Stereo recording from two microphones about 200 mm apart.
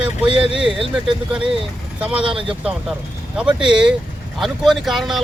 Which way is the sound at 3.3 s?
5° right (ahead or behind).